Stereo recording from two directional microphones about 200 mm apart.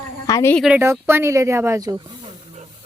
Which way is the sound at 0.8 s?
10° right (ahead or behind).